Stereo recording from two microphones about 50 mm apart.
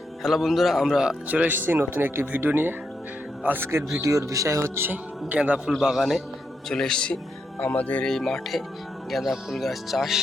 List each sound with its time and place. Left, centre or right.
0.2 s speech: centre
1.3 s speech: right
3.6 s speech: right
4.0 s speech: right
4.7 s speech: right
5.3 s a man's voice: right
5.8 s speech: centre
6.7 s speech: centre
7.6 s speech: left
8.0 s speech: centre